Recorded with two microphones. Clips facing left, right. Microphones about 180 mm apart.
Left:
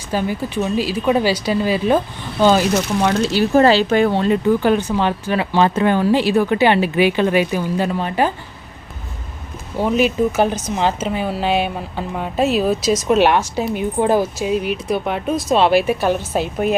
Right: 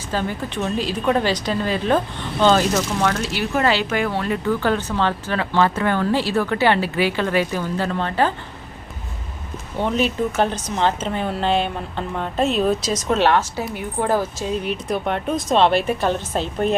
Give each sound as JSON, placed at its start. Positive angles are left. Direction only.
{"t": 0.1, "sound": "speech", "side_deg": 10}
{"t": 3.1, "sound": "speech", "side_deg": 35}
{"t": 9.7, "sound": "speech", "side_deg": 5}